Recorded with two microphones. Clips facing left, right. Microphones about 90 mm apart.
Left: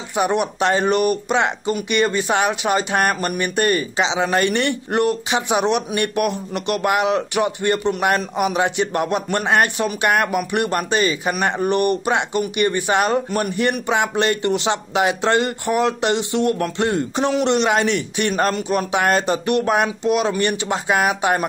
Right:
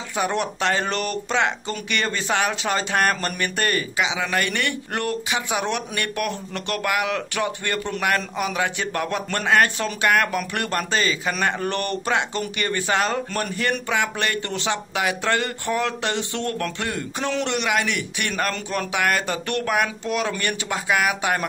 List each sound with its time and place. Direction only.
0.1 s speech: 20° left (ahead or behind)